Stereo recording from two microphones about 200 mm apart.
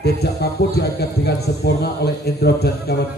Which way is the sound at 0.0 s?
55° left (ahead or behind).